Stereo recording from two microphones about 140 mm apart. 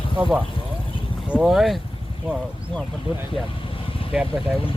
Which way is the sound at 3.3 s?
40° left (ahead or behind).